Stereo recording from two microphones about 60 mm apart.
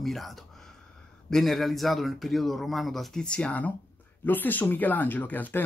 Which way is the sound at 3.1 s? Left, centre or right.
Centre.